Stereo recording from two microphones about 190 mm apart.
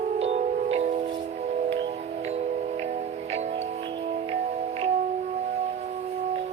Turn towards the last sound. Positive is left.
turn(degrees=-35)  # may be behind; listen again after turning